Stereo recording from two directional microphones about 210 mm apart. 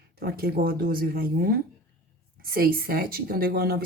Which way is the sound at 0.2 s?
45° right (ahead or behind).